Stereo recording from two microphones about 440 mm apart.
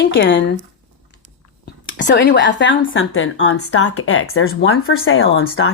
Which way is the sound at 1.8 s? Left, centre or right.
Left.